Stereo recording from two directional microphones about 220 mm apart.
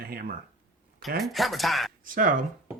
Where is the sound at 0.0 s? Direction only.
45° right (ahead or behind).